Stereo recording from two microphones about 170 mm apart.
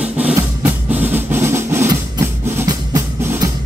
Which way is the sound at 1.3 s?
15° right (ahead or behind).